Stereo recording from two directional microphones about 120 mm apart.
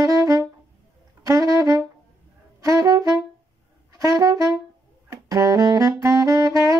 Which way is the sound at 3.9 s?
30° right (ahead or behind).